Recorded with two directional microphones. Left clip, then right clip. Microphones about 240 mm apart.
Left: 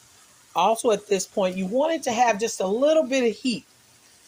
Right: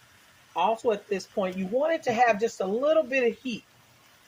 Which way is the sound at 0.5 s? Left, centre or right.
Left.